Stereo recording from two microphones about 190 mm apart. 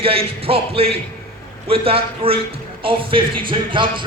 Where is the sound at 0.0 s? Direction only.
30° right (ahead or behind).